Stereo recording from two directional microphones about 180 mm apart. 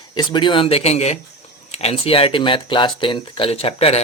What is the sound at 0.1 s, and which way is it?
Speech, 25° left (ahead or behind).